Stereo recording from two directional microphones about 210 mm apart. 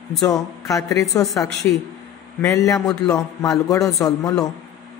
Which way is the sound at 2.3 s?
15° left (ahead or behind).